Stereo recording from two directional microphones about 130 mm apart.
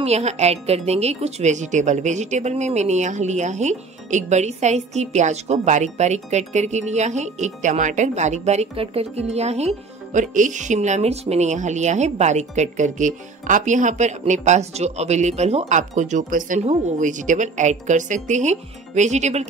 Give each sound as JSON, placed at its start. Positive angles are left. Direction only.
{"t": 0.0, "sound": "a woman's voice", "side_deg": -55}
{"t": 16.6, "sound": "a woman's voice", "side_deg": -70}